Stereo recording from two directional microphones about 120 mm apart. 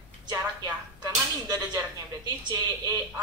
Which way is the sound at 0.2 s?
35° right (ahead or behind).